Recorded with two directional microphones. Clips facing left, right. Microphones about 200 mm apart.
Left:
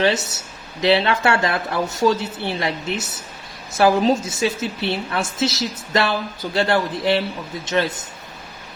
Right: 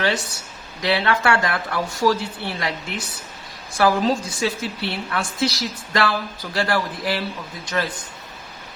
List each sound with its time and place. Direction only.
0.0 s a woman's voice: 25° left (ahead or behind)